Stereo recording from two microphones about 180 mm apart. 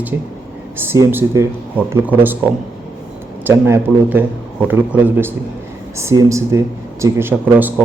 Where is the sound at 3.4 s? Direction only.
15° right (ahead or behind).